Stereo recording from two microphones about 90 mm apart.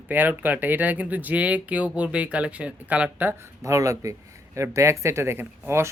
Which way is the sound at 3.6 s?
35° right (ahead or behind).